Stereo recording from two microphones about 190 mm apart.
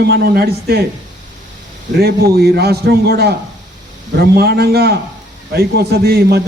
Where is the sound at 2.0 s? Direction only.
55° right (ahead or behind).